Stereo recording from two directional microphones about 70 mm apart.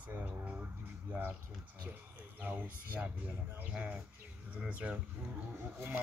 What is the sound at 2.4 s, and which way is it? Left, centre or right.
Speech, right.